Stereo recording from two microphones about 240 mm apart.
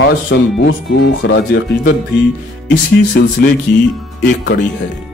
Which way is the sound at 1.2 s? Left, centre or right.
Left.